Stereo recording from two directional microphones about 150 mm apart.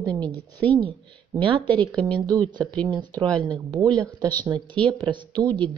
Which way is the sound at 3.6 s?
30° right (ahead or behind).